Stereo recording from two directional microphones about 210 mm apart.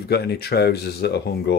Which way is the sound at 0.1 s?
50° left (ahead or behind).